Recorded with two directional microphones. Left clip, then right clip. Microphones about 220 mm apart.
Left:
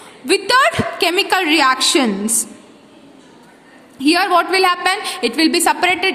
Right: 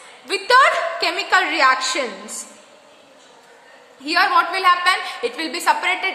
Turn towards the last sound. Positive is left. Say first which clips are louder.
# left 4 dB
turn(degrees=40)  # may be behind; listen again after turning